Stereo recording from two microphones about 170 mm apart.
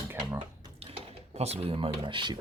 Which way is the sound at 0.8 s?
35° right (ahead or behind).